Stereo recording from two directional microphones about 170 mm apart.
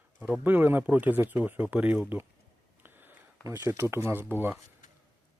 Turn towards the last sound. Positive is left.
turn(degrees=-10)  # may be behind; listen again after turning